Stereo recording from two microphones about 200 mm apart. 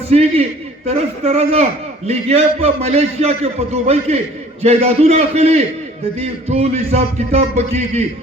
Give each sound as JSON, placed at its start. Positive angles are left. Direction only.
{"t": 0.1, "sound": "a man's voice", "side_deg": -30}